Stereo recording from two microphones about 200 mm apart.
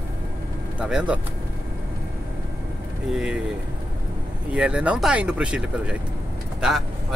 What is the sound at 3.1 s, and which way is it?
Speech, 5° right (ahead or behind).